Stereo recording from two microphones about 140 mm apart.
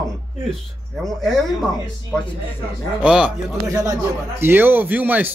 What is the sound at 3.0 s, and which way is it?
Speech, 5° right (ahead or behind).